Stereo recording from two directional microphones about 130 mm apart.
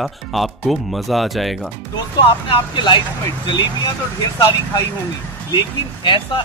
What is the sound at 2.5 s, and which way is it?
Speech, 35° left (ahead or behind).